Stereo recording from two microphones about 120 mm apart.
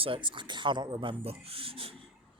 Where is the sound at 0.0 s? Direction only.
45° right (ahead or behind).